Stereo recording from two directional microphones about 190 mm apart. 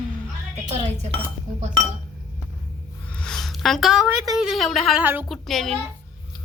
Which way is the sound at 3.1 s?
5° left (ahead or behind).